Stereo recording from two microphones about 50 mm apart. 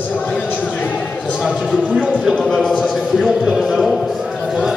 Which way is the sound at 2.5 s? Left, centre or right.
Centre.